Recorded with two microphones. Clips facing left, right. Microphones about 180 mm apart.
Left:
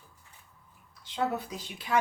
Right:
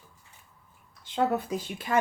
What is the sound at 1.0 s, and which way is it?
Speech, 50° right (ahead or behind).